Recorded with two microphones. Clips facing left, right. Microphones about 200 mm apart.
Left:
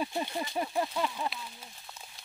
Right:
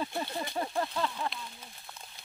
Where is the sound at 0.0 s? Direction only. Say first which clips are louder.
Left 1 dB; 15° left (ahead or behind).